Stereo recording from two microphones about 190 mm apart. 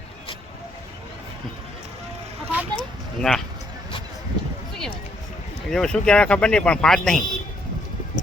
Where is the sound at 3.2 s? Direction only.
Centre (ahead or behind).